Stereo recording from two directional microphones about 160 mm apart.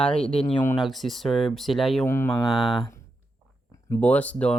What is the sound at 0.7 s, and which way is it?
Speech, centre (ahead or behind).